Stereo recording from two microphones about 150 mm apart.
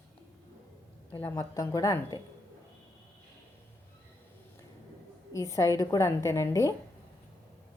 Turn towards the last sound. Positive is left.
turn(degrees=20)  # may be behind; listen again after turning